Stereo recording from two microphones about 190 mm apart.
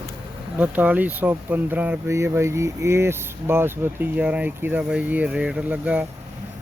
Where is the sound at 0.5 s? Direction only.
10° right (ahead or behind).